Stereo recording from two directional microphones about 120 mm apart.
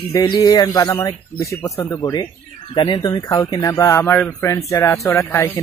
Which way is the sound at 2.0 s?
35° left (ahead or behind).